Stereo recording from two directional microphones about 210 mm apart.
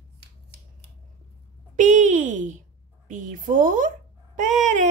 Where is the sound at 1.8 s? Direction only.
35° right (ahead or behind).